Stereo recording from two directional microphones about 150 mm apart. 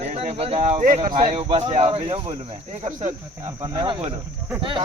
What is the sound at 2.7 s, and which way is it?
Speech, 50° right (ahead or behind).